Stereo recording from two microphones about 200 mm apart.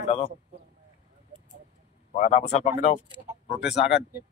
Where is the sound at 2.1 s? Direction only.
35° left (ahead or behind).